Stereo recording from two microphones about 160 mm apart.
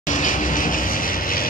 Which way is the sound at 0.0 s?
55° left (ahead or behind).